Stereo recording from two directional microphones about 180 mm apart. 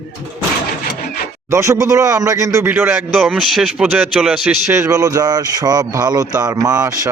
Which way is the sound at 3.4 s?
Centre (ahead or behind).